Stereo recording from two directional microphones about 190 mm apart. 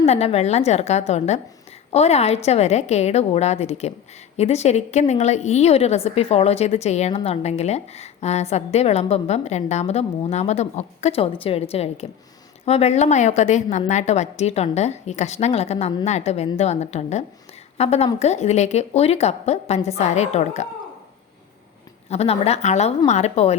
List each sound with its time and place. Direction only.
0.0 s a woman's voice: 30° left (ahead or behind)
22.1 s a woman's voice: 35° left (ahead or behind)